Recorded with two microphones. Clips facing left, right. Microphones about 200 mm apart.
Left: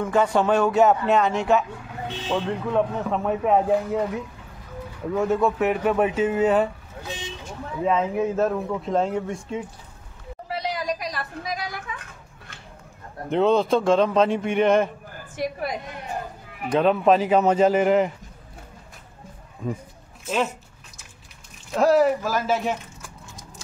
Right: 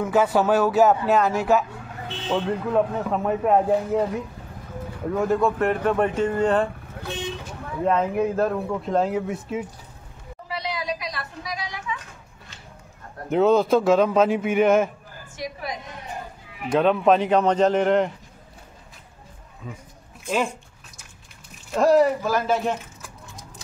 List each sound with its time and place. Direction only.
0.0 s speech: 5° right (ahead or behind)
7.0 s speech: 60° right (ahead or behind)
7.8 s speech: centre (ahead or behind)
10.5 s a sound: 45° left (ahead or behind)
13.3 s speech: 5° right (ahead or behind)
15.3 s a sound: 55° left (ahead or behind)
16.7 s speech: centre (ahead or behind)
19.6 s speech: 45° left (ahead or behind)
20.3 s speech: 5° left (ahead or behind)
21.6 s speech: centre (ahead or behind)